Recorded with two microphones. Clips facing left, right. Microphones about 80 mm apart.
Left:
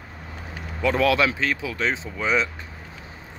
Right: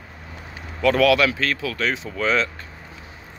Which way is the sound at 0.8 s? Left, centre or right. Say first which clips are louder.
Right 3 dB; left.